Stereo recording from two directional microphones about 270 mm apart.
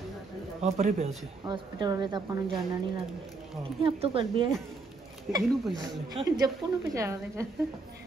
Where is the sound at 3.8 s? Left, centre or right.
Right.